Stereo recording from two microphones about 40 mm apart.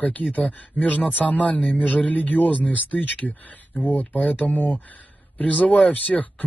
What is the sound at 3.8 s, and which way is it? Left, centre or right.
Speech, left.